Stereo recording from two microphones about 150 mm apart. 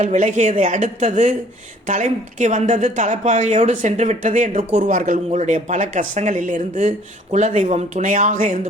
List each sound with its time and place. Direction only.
0.0 s speech: 55° right (ahead or behind)